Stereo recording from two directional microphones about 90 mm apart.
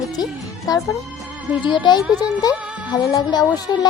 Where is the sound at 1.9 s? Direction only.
55° left (ahead or behind).